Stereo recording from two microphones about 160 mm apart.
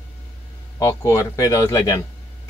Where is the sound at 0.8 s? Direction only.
20° left (ahead or behind).